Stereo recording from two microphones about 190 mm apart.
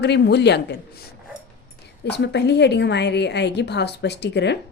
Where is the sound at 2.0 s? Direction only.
60° left (ahead or behind).